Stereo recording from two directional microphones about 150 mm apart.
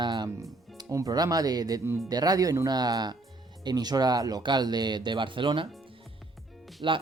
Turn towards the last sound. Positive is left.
turn(degrees=-35)  # may be behind; listen again after turning